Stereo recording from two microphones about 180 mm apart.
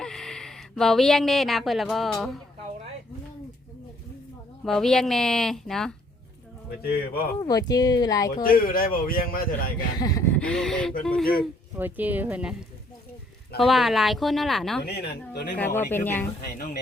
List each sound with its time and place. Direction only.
0.0 s speech: 5° left (ahead or behind)
4.6 s a woman's voice: centre (ahead or behind)
6.8 s speech: 60° left (ahead or behind)
7.4 s speech: 20° left (ahead or behind)
8.4 s speech: 55° left (ahead or behind)
10.0 s a sound: 20° left (ahead or behind)
10.3 s a woman's voice: 5° left (ahead or behind)
11.8 s a woman's voice: 10° right (ahead or behind)
14.8 s speech: 65° left (ahead or behind)
15.5 s speech: 10° left (ahead or behind)
16.6 s speech: 50° left (ahead or behind)